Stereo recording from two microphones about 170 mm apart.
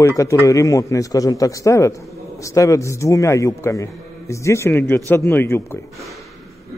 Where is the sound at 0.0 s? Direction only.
20° left (ahead or behind).